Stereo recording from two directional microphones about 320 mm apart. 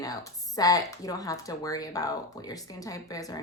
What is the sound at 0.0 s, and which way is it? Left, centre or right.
Speech, centre.